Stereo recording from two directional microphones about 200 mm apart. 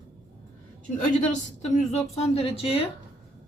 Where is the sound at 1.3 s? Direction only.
35° left (ahead or behind).